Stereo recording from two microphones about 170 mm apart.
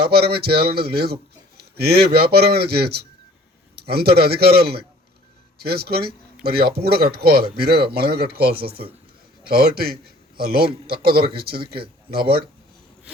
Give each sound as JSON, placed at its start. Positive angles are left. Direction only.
{"t": 0.0, "sound": "a man's voice", "side_deg": -70}